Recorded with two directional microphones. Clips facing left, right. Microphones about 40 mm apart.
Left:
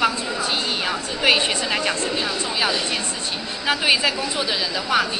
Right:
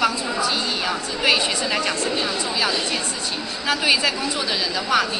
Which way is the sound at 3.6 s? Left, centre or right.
Centre.